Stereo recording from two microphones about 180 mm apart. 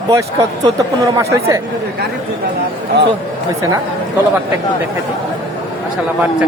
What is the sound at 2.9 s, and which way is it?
Speech, 70° right (ahead or behind).